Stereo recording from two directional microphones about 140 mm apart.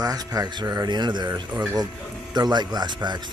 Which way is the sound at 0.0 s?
25° right (ahead or behind).